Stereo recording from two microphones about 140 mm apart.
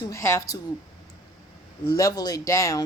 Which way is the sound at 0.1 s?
20° left (ahead or behind).